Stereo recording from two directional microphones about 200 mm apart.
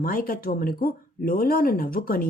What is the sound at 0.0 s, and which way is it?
Speech, 45° left (ahead or behind).